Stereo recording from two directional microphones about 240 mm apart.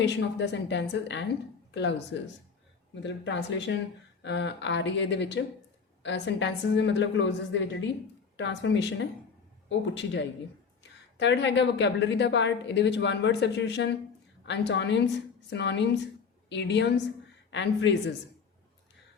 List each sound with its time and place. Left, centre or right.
0.0 s a woman's voice: left